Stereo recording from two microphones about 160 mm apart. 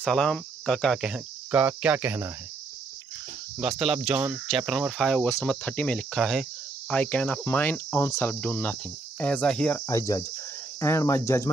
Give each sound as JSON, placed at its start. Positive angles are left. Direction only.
{"t": 0.0, "sound": "cricket", "side_deg": 5}
{"t": 3.5, "sound": "cricket", "side_deg": -5}
{"t": 9.8, "sound": "cricket", "side_deg": 20}